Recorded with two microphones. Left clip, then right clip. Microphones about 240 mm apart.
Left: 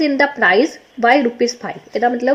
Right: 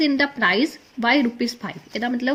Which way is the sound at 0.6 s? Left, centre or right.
Right.